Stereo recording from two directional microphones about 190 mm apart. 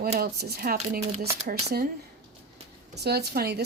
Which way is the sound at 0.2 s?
55° right (ahead or behind).